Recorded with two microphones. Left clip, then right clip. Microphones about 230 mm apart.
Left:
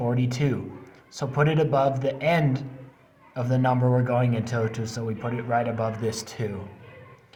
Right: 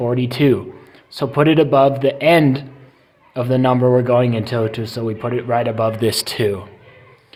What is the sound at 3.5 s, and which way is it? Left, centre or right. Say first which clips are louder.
Speech: right 9 dB; right.